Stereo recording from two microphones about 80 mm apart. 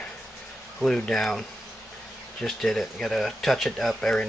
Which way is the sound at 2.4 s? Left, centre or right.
Centre.